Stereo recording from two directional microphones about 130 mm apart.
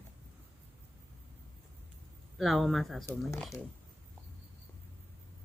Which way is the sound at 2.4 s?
Centre (ahead or behind).